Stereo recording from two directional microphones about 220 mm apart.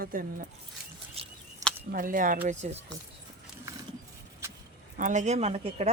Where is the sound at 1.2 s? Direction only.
25° right (ahead or behind).